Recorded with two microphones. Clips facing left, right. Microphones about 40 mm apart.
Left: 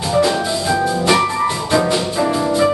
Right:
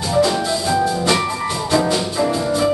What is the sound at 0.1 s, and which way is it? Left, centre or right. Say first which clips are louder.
Music: left 1 dB; centre.